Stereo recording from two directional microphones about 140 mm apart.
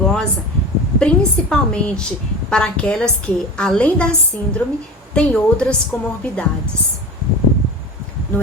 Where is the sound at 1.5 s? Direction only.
5° left (ahead or behind).